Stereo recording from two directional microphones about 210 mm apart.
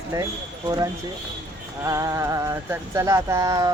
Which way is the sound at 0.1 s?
15° right (ahead or behind).